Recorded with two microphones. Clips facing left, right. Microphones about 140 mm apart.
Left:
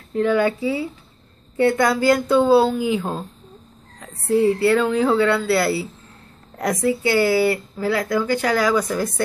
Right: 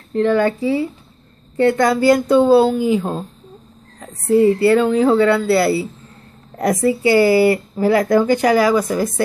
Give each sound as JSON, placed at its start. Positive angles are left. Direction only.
{"t": 0.1, "sound": "speech", "side_deg": 5}
{"t": 2.0, "sound": "speech", "side_deg": 0}